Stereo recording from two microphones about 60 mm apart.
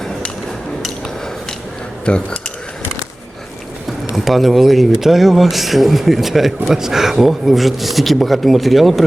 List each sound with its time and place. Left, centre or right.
2.0 s speech: centre
4.1 s speech: centre